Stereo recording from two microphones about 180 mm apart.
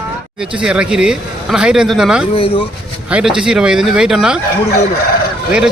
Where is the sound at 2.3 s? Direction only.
30° left (ahead or behind).